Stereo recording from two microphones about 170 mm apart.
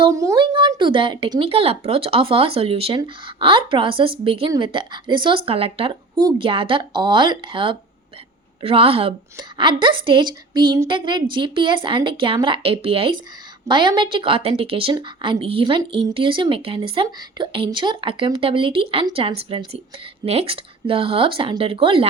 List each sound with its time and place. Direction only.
0.0 s a woman's voice: 20° right (ahead or behind)